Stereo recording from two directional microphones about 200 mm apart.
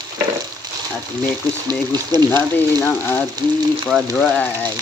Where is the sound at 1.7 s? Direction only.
20° right (ahead or behind).